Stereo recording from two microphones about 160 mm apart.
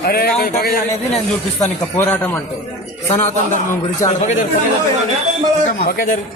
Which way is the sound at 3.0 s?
45° left (ahead or behind).